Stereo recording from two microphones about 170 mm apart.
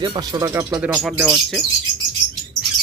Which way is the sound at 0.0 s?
25° right (ahead or behind).